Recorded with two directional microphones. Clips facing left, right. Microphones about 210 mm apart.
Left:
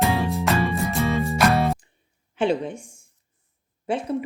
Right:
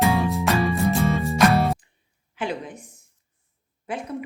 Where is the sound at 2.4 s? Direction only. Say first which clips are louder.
Left 7 dB; 30° left (ahead or behind).